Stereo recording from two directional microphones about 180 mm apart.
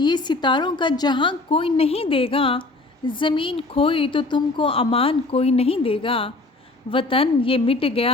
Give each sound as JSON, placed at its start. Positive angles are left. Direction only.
{"t": 0.0, "sound": "a woman's voice", "side_deg": 25}